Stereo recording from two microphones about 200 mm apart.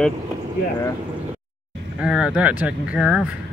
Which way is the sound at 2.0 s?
5° right (ahead or behind).